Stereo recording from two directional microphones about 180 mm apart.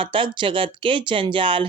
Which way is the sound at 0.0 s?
30° right (ahead or behind).